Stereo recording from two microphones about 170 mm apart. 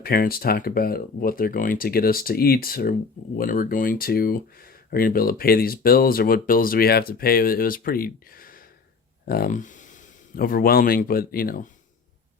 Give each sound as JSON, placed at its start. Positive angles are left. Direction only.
{"t": 0.0, "sound": "speech", "side_deg": 60}